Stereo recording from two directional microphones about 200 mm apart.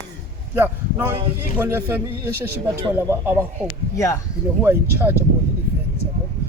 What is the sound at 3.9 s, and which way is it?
Speech, 15° left (ahead or behind).